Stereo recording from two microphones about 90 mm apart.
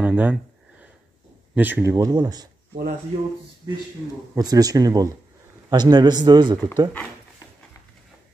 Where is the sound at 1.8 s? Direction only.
40° right (ahead or behind).